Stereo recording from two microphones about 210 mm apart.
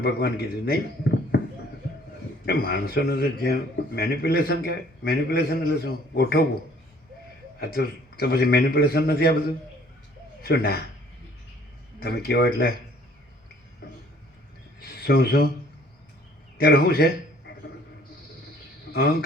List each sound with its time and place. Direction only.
0.0 s speech: 50° left (ahead or behind)
2.5 s a man's voice: 45° left (ahead or behind)
7.6 s a man's voice: 50° left (ahead or behind)
10.4 s a man's voice: 50° left (ahead or behind)
11.9 s a man's voice: 50° left (ahead or behind)
14.8 s a sound: 45° left (ahead or behind)
16.6 s a man's voice: 45° left (ahead or behind)
18.9 s a sound: 50° left (ahead or behind)